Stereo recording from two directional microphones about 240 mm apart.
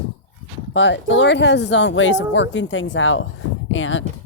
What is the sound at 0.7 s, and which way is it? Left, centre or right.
Speech, left.